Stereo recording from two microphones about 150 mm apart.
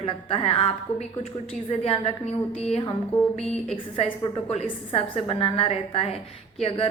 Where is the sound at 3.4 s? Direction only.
5° left (ahead or behind).